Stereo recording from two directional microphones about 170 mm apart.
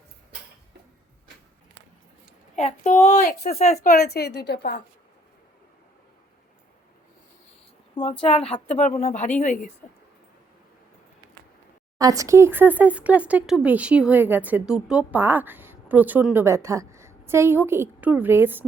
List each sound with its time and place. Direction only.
2.6 s a woman's voice: 45° left (ahead or behind)
3.9 s a woman's voice: 65° left (ahead or behind)
8.2 s a woman's voice: 35° left (ahead or behind)
11.9 s speech: 20° right (ahead or behind)